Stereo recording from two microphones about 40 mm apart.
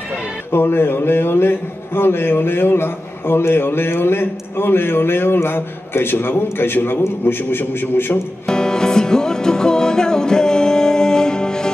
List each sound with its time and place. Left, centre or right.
0.5 s a man's voice: left
8.5 s music: centre